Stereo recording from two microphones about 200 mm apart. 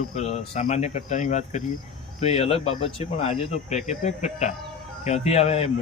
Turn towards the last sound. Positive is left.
turn(degrees=30)  # may be behind; listen again after turning